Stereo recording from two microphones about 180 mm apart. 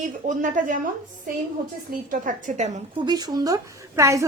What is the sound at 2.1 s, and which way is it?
Speech, 45° right (ahead or behind).